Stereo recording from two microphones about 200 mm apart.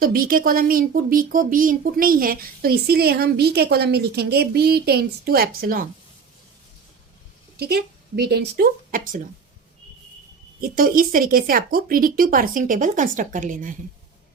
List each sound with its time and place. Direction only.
0.0 s speech: 45° right (ahead or behind)
7.5 s speech: 50° right (ahead or behind)
10.6 s speech: 45° right (ahead or behind)